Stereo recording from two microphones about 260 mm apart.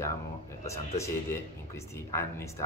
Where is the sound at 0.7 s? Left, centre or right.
Centre.